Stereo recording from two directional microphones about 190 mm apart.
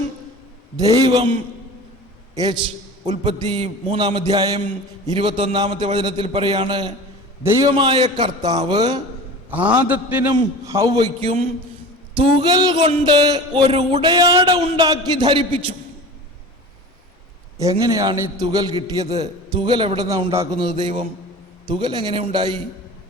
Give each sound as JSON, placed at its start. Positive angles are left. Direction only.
{"t": 0.8, "sound": "a man's voice", "side_deg": -25}
{"t": 2.3, "sound": "a man's voice", "side_deg": -20}
{"t": 9.5, "sound": "a man's voice", "side_deg": -10}
{"t": 14.0, "sound": "a man's voice", "side_deg": -20}
{"t": 17.6, "sound": "a man's voice", "side_deg": -20}